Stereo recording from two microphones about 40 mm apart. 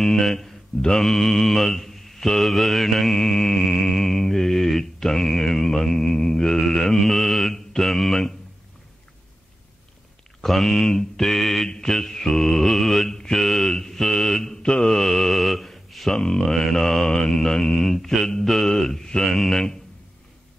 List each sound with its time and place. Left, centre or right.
0.0 s speech: centre
0.8 s mantra: centre
10.4 s mantra: centre
14.6 s mantra: left
14.9 s mantra: centre